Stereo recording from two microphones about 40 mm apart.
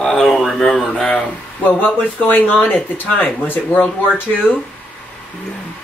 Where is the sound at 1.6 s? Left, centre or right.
Left.